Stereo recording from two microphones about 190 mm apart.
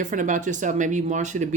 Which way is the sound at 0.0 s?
40° right (ahead or behind).